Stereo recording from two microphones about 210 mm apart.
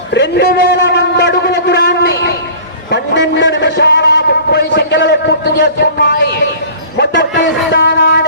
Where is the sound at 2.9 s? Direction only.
60° left (ahead or behind).